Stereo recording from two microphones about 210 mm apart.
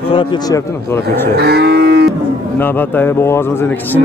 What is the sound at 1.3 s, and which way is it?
Livestock, 50° right (ahead or behind).